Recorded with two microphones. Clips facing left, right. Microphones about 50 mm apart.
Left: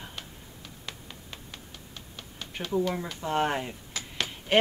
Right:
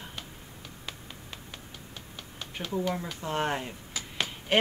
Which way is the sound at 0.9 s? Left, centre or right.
Centre.